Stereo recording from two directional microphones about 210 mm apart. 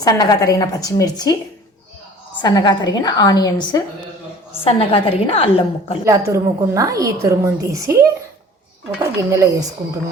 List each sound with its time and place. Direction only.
0.0 s speech: 15° left (ahead or behind)
2.4 s a woman's voice: 20° left (ahead or behind)
6.1 s a woman's voice: 15° right (ahead or behind)